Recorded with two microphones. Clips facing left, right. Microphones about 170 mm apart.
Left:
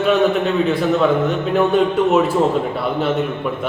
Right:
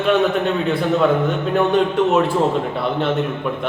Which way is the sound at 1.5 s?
5° left (ahead or behind).